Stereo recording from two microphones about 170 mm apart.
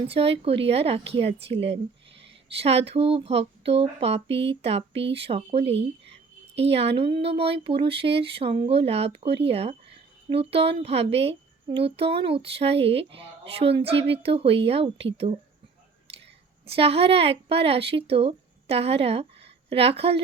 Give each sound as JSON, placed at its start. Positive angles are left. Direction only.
{"t": 0.1, "sound": "speech", "side_deg": -35}
{"t": 5.6, "sound": "speech", "side_deg": -90}
{"t": 6.6, "sound": "speech", "side_deg": -35}
{"t": 16.6, "sound": "a woman's voice", "side_deg": -35}